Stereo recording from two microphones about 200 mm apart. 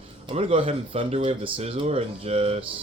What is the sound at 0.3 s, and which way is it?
Speech, 30° right (ahead or behind).